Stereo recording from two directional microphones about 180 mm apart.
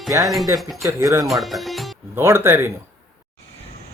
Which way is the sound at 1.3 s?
Centre (ahead or behind).